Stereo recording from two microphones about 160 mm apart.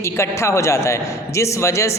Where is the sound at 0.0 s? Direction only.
20° left (ahead or behind).